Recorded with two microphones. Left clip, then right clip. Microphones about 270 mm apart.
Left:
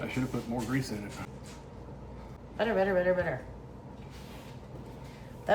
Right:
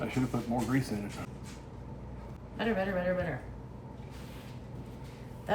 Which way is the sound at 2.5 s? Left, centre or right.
Left.